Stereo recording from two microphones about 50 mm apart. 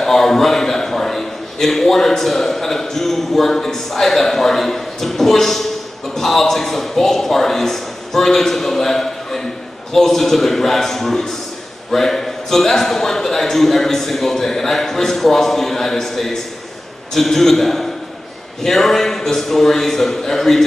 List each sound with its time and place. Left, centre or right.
0.0 s a man's voice: centre